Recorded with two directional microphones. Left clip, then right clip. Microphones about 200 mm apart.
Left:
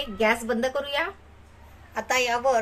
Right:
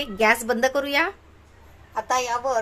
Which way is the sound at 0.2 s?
30° right (ahead or behind).